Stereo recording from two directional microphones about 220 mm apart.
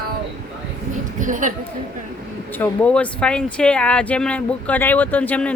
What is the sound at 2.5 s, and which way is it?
Speech, 5° left (ahead or behind).